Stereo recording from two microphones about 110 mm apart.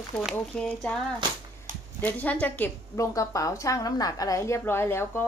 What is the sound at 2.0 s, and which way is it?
Speech, 15° left (ahead or behind).